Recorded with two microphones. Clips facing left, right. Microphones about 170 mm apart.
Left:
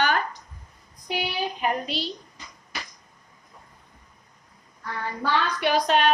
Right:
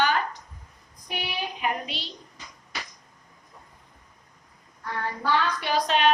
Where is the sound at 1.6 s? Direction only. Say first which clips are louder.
Left 3 dB; 40° left (ahead or behind).